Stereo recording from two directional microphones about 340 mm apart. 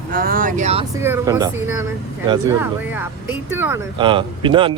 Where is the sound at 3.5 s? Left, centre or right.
Centre.